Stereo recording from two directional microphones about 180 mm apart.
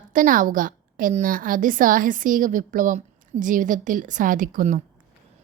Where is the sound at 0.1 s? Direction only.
50° right (ahead or behind).